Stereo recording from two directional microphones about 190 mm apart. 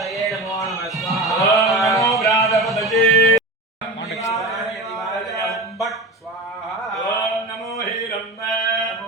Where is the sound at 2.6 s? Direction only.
Centre (ahead or behind).